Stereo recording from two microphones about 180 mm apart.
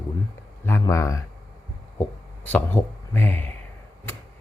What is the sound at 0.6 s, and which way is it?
Speech, 15° left (ahead or behind).